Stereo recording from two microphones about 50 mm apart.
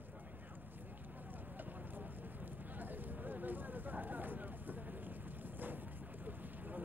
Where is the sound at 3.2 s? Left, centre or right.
Right.